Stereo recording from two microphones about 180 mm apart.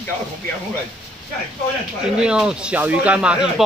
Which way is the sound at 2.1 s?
5° right (ahead or behind).